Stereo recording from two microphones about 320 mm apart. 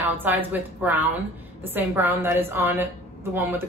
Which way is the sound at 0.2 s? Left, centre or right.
Centre.